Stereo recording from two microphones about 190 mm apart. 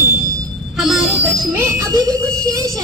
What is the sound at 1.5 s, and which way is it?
Speech, 15° right (ahead or behind).